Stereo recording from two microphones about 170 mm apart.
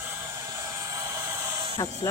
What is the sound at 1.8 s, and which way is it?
Music, 20° left (ahead or behind).